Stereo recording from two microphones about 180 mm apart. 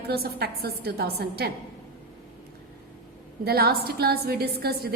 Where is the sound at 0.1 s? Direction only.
60° right (ahead or behind).